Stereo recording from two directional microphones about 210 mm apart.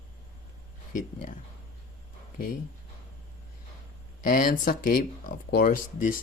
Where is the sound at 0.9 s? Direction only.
40° left (ahead or behind).